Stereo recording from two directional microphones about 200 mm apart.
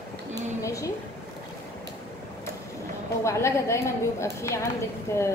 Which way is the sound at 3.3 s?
15° left (ahead or behind).